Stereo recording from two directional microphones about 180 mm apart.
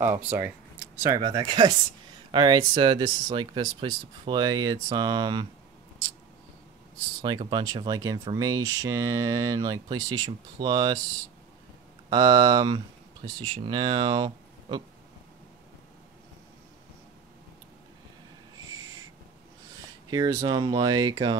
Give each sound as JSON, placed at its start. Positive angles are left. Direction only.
{"t": 0.0, "sound": "speech", "side_deg": -10}
{"t": 7.2, "sound": "speech", "side_deg": -25}
{"t": 12.1, "sound": "speech", "side_deg": -20}
{"t": 20.1, "sound": "speech", "side_deg": -20}